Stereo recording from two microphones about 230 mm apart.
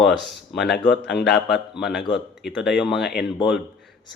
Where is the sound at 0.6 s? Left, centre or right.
Left.